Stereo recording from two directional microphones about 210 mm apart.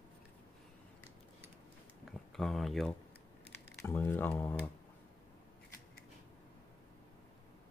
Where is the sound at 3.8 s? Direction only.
10° left (ahead or behind).